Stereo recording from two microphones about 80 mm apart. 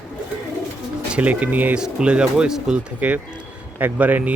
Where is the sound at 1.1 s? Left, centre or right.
Centre.